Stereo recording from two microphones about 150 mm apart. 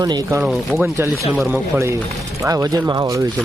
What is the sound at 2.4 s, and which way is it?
Speech, 20° right (ahead or behind).